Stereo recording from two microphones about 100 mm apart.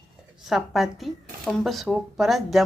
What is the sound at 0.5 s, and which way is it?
Speech, centre (ahead or behind).